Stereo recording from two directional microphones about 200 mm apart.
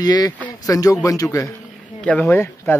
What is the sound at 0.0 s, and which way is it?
Speech, 20° left (ahead or behind).